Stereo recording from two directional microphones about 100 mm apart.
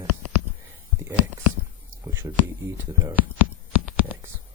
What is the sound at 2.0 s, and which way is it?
Speech, 30° right (ahead or behind).